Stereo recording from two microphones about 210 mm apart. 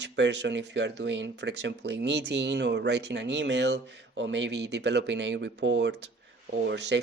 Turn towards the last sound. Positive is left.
turn(degrees=-55)  # may be behind; listen again after turning